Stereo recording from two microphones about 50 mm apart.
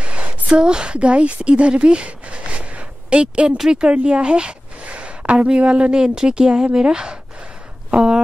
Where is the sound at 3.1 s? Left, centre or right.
Right.